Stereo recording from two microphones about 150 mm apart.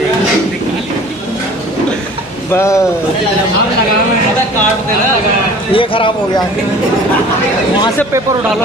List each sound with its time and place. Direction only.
2.5 s speech: 20° left (ahead or behind)
5.7 s speech: 35° left (ahead or behind)